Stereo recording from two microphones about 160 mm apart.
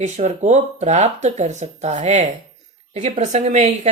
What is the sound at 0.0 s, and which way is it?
Speech, 50° right (ahead or behind).